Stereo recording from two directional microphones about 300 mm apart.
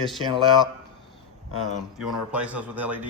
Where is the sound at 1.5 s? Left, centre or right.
Centre.